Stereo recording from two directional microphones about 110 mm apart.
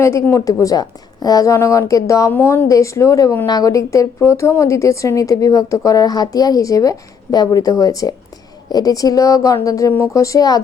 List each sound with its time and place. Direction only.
0.0 s a woman's voice: 25° left (ahead or behind)
2.3 s a woman's voice: 20° left (ahead or behind)